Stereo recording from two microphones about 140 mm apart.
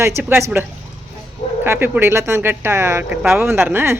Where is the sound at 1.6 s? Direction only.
15° right (ahead or behind).